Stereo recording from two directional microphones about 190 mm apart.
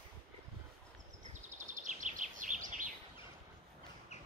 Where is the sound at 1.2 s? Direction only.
40° right (ahead or behind).